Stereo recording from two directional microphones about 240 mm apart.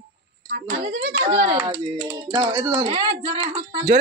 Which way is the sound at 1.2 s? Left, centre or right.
Right.